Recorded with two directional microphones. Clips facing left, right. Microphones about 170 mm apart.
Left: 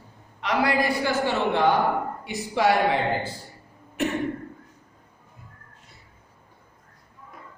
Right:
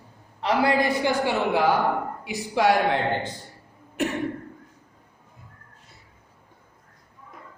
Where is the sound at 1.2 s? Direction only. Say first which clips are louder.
Left 3 dB; 10° right (ahead or behind).